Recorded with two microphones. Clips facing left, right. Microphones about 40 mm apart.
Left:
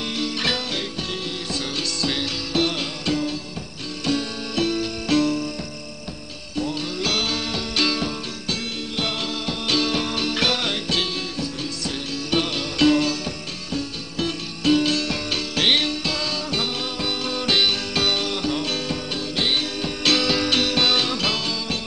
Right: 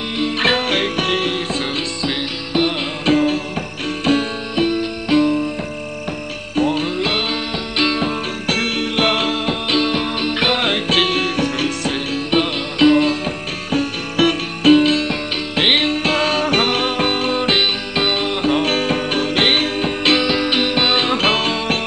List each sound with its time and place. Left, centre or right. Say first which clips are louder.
0.2 s music: right 9 dB; right
2.0 s music: right 3 dB; centre
3.1 s music: right 10 dB; right
4.6 s music: right 5 dB; right
6.5 s music: right 8 dB; right
7.0 s music: right 4 dB; right
8.5 s music: right 9 dB; right
9.7 s music: right 3 dB; right
12.3 s music: right 4 dB; right
13.7 s music: right 9 dB; right
14.7 s music: right 7 dB; right
20.1 s music: right 3 dB; right